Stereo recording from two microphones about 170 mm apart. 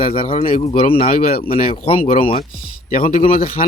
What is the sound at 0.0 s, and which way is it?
Speech, 30° left (ahead or behind).